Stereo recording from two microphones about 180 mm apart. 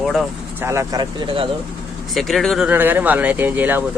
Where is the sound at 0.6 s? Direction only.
15° right (ahead or behind).